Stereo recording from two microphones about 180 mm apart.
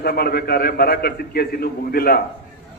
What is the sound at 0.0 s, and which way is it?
A man's voice, 60° left (ahead or behind).